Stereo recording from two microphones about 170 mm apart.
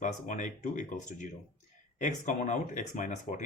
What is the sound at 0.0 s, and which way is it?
Speech, 45° left (ahead or behind).